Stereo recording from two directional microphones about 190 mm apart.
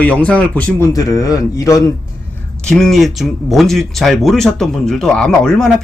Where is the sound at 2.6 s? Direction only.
Centre (ahead or behind).